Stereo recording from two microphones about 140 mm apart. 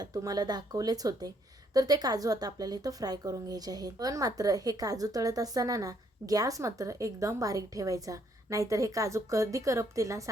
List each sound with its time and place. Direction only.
0.0 s a woman's voice: 25° right (ahead or behind)